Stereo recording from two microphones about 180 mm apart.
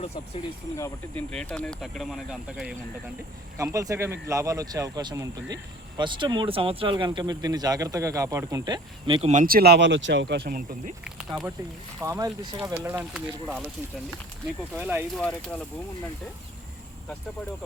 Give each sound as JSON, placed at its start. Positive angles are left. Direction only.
{"t": 0.8, "sound": "speech", "side_deg": 5}
{"t": 3.6, "sound": "speech", "side_deg": -15}
{"t": 9.3, "sound": "speech", "side_deg": -50}
{"t": 11.9, "sound": "speech", "side_deg": -20}
{"t": 13.0, "sound": "speech", "side_deg": 0}
{"t": 14.7, "sound": "speech", "side_deg": -5}
{"t": 15.2, "sound": "speech", "side_deg": 5}